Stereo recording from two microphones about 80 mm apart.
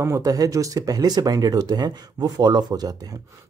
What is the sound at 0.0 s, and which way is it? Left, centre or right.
Speech, right.